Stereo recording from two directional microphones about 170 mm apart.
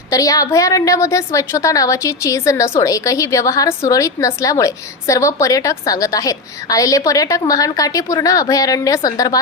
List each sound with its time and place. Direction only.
0.1 s a woman's voice: 20° left (ahead or behind)